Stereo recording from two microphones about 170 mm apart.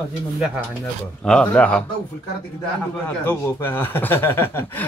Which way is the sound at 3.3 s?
10° left (ahead or behind).